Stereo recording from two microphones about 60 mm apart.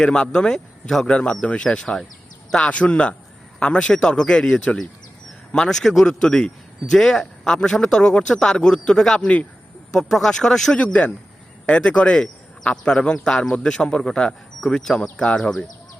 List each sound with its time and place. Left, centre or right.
0.0 s speech: centre
10.8 s speech: left
12.1 s a sound: centre
12.8 s speech: centre
15.4 s speech: centre